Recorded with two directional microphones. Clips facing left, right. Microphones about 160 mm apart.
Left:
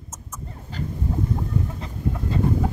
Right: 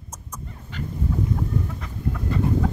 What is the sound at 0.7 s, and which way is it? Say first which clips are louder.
Goose: left 2 dB; 35° left (ahead or behind).